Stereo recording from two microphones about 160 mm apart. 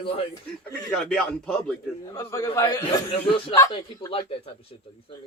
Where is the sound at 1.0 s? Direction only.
5° left (ahead or behind).